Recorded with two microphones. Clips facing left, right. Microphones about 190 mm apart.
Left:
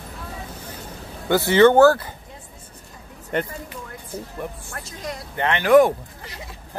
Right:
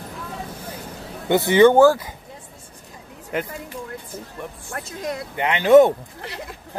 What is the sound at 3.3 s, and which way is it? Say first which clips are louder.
Speech: left 2 dB; centre (ahead or behind).